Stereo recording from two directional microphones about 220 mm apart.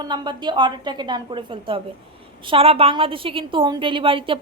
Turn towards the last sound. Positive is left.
turn(degrees=-25)  # may be behind; listen again after turning